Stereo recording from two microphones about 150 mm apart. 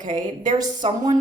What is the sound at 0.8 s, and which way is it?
Speech, 40° right (ahead or behind).